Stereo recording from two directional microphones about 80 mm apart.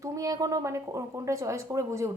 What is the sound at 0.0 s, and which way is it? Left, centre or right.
Speech, right.